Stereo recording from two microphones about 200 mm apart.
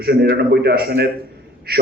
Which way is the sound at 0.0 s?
55° right (ahead or behind).